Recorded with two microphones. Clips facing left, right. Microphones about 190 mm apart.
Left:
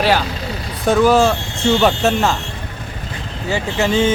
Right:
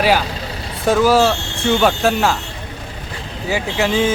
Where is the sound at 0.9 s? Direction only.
5° right (ahead or behind).